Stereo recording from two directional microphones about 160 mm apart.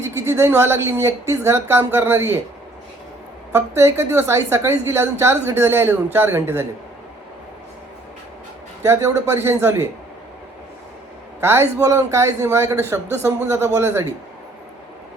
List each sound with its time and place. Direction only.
0.0 s a man's voice: 15° right (ahead or behind)
3.5 s a man's voice: 15° right (ahead or behind)
8.8 s a man's voice: 15° right (ahead or behind)
11.3 s a man's voice: 15° right (ahead or behind)